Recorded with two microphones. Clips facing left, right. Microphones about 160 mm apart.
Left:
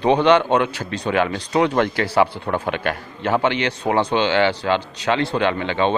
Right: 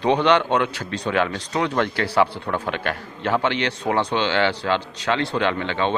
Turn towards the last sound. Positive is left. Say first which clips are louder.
# left 3 dB
turn(degrees=10)  # may be behind; listen again after turning